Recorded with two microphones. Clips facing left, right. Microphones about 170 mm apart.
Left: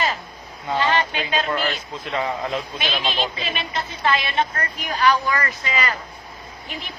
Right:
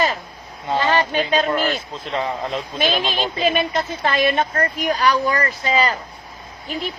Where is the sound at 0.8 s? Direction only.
40° right (ahead or behind).